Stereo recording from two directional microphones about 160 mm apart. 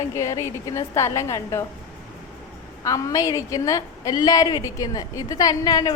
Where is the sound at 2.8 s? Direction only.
20° left (ahead or behind).